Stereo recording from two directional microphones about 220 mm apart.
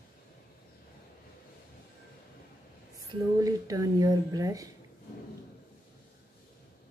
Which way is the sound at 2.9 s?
15° right (ahead or behind).